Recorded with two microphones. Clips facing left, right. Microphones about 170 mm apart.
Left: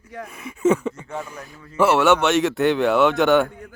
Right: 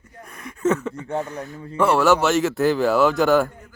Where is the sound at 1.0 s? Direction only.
35° right (ahead or behind).